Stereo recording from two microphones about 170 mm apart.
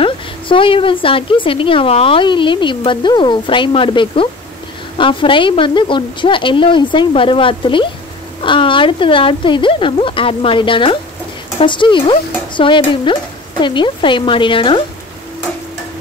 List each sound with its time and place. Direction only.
0.0 s a woman's voice: 30° left (ahead or behind)